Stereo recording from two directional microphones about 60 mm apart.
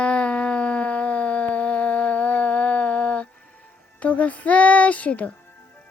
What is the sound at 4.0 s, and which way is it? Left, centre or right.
Speech, left.